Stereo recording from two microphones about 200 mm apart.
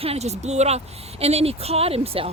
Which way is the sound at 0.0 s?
30° right (ahead or behind).